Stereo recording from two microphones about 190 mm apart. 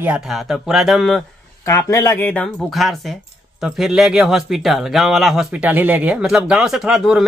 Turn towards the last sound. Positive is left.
turn(degrees=0)  # may be behind; listen again after turning